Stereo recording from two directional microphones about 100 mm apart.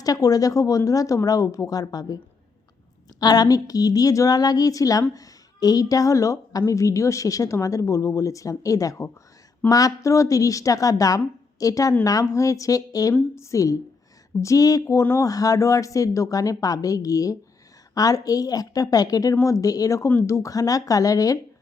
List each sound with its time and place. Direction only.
0.0 s a woman's voice: 35° left (ahead or behind)
3.2 s a woman's voice: 40° left (ahead or behind)